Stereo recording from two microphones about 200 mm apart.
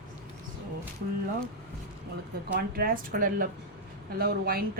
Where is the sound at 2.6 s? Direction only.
45° right (ahead or behind).